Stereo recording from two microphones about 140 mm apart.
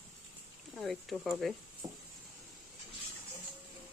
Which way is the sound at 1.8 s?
30° right (ahead or behind).